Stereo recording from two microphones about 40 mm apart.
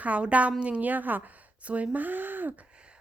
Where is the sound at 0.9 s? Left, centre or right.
Right.